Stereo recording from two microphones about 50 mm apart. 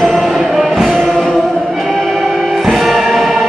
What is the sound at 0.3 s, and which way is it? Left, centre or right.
Music, centre.